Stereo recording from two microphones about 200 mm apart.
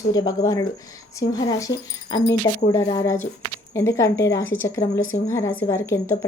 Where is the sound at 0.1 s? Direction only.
20° left (ahead or behind).